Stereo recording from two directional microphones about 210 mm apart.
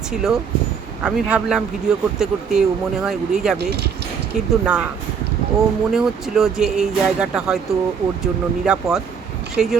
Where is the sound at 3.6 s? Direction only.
50° right (ahead or behind).